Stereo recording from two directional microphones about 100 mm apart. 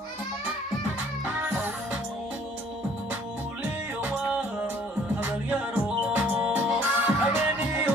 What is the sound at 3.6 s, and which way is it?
Music, 15° right (ahead or behind).